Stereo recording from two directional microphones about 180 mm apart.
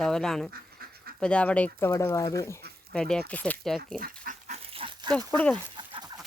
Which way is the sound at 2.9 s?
5° left (ahead or behind).